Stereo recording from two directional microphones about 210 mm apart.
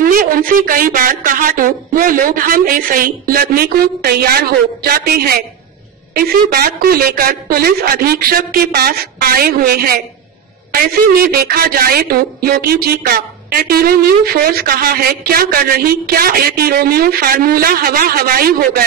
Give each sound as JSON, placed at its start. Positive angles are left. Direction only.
{"t": 0.0, "sound": "a woman's voice", "side_deg": -40}